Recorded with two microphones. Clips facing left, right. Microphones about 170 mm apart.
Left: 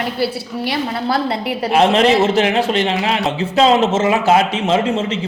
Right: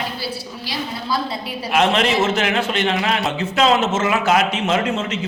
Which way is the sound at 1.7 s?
35° left (ahead or behind).